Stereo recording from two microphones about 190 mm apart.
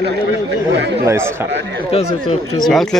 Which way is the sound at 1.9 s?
35° left (ahead or behind).